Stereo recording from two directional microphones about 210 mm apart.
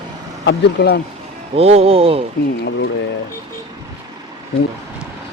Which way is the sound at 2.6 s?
55° left (ahead or behind).